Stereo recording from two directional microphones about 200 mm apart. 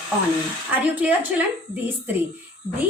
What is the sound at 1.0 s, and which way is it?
Speech, 5° right (ahead or behind).